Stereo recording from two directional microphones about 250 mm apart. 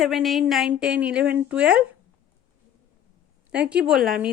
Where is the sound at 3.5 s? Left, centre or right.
Centre.